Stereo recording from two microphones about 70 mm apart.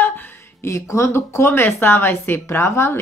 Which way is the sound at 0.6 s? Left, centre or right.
Left.